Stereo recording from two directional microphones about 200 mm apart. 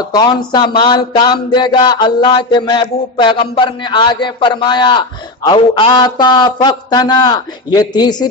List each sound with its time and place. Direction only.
0.0 s music: 20° left (ahead or behind)